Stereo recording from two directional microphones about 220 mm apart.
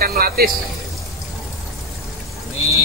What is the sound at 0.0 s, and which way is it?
Speech, 45° right (ahead or behind).